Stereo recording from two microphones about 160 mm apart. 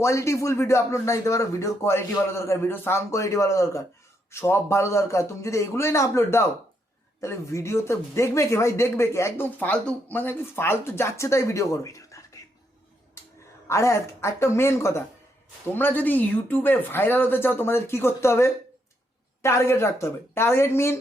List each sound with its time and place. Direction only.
0.0 s speech: 20° left (ahead or behind)
13.7 s speech: 15° left (ahead or behind)